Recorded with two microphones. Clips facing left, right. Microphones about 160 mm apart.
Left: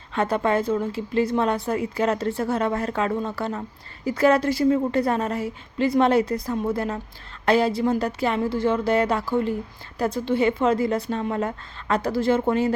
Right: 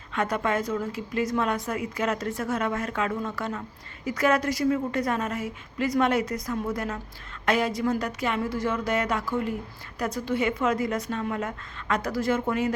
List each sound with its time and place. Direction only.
0.1 s a woman's voice: 30° left (ahead or behind)